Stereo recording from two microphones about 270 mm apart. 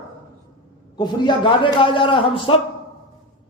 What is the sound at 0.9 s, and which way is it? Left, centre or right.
A man's voice, centre.